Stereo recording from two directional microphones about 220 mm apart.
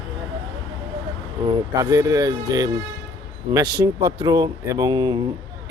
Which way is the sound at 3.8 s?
20° right (ahead or behind).